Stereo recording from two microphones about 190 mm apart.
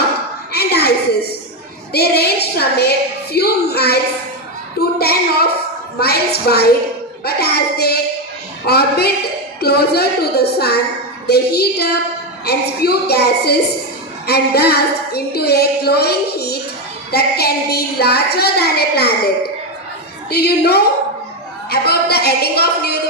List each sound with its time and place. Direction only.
0.5 s a sound: 60° left (ahead or behind)
1.9 s child singing: 55° left (ahead or behind)
3.3 s a woman's voice: 55° left (ahead or behind)
7.3 s child singing: 55° left (ahead or behind)
8.6 s a woman's voice: 55° left (ahead or behind)
20.3 s a woman's voice: 60° left (ahead or behind)